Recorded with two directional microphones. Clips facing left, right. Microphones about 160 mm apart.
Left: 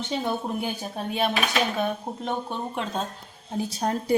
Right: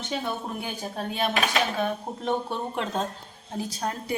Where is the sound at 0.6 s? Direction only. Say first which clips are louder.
Left 2 dB; 20° left (ahead or behind).